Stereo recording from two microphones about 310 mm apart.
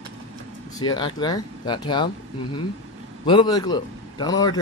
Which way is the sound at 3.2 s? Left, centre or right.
Centre.